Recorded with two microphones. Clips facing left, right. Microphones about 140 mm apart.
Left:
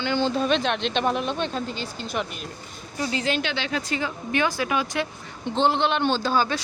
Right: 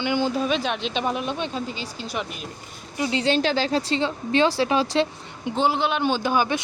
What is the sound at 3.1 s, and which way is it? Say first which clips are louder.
Speech: right 6 dB; 30° right (ahead or behind).